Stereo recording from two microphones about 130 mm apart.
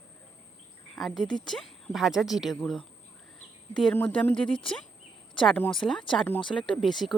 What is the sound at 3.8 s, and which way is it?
Speech, 10° left (ahead or behind).